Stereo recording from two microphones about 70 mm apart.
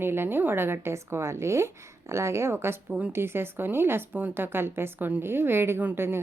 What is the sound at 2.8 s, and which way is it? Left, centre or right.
Speech, right.